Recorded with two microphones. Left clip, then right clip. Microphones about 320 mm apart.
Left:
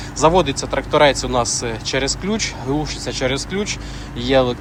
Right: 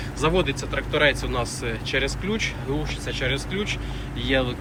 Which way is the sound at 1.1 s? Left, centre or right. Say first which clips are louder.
Left 7 dB; centre.